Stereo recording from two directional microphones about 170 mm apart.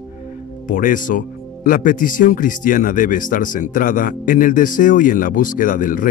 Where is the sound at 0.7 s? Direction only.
55° left (ahead or behind).